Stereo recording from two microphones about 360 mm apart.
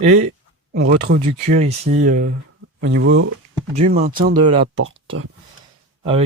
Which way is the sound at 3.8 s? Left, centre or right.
Centre.